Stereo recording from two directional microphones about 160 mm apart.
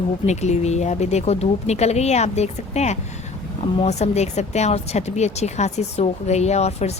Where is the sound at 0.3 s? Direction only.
45° left (ahead or behind).